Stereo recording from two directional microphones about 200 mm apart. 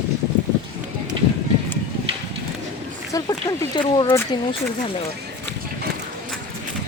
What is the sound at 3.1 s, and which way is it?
Speech, 20° left (ahead or behind).